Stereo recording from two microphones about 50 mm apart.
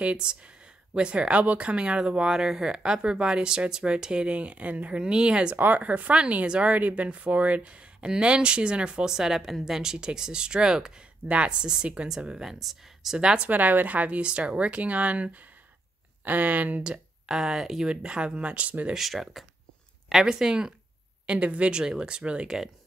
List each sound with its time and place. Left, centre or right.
0.0 s speech: right
5.6 s speech: right
9.1 s a woman's voice: centre
11.2 s a woman's voice: right
12.5 s speech: centre
13.2 s a woman's voice: centre
13.5 s speech: right
16.8 s speech: centre
17.8 s speech: centre
18.9 s a woman's voice: centre
21.3 s speech: right